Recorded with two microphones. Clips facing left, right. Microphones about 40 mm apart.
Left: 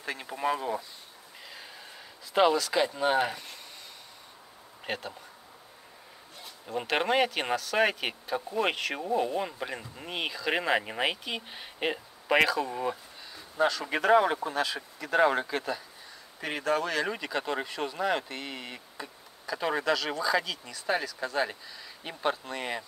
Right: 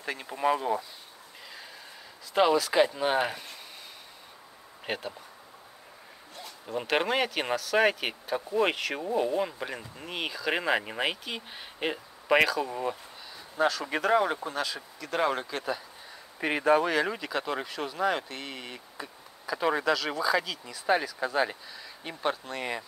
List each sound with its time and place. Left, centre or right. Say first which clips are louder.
0.0 s speech: right 3 dB; centre
2.5 s speech: right 3 dB; centre
4.8 s speech: right 1 dB; centre
6.7 s speech: even; centre
16.3 s speech: right 5 dB; right
17.1 s speech: even; centre
20.8 s speech: right 4 dB; centre